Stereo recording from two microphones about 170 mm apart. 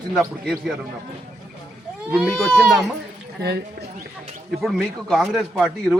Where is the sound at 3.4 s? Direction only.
70° right (ahead or behind).